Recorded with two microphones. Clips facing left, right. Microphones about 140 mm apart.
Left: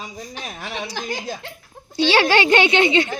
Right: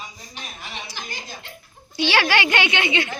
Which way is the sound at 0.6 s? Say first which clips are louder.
Left 8 dB; 85° left.